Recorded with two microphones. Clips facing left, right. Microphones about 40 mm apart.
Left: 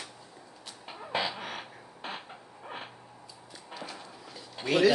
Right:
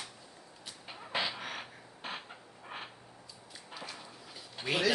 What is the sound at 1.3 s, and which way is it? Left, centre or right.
Beatboxing, centre.